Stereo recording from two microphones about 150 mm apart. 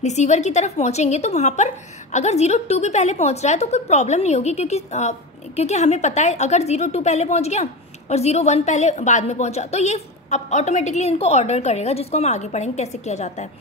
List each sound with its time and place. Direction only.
0.0 s a woman's voice: 50° left (ahead or behind)